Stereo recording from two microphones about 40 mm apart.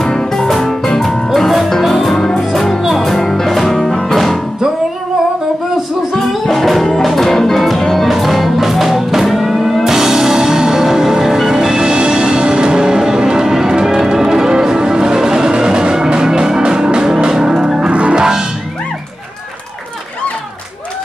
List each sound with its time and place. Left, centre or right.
0.0 s music: centre
1.0 s music: centre
6.1 s music: centre